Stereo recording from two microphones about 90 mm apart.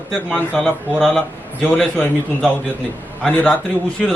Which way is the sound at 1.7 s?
20° left (ahead or behind).